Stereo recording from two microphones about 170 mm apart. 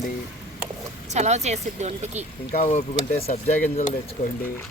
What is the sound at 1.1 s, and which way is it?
Speech, 40° right (ahead or behind).